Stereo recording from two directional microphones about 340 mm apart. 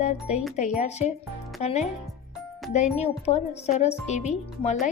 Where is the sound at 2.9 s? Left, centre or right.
Centre.